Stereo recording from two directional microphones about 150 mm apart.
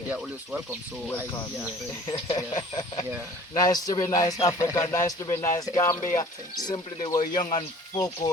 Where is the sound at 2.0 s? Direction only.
35° left (ahead or behind).